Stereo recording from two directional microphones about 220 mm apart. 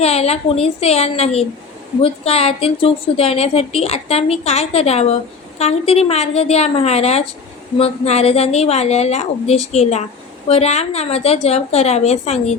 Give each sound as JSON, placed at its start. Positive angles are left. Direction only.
{"t": 0.0, "sound": "a woman's voice", "side_deg": 30}